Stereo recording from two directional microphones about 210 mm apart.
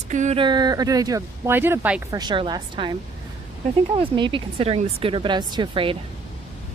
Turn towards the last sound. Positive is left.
turn(degrees=-25)  # may be behind; listen again after turning